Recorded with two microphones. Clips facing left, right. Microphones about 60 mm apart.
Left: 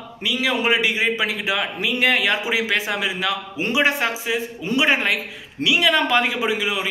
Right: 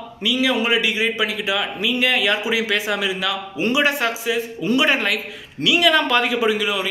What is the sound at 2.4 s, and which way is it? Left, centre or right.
A man's voice, left.